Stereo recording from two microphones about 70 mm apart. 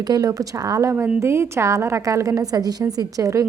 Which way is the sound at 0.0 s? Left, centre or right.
Right.